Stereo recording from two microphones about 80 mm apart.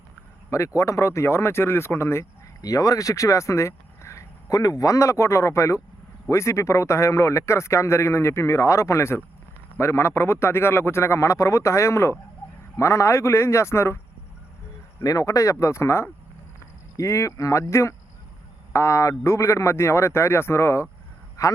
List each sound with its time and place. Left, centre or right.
0.8 s speech: left
2.6 s speech: left
15.0 s speech: left